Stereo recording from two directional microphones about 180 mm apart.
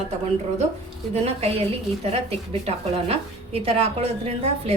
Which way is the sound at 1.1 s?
35° right (ahead or behind).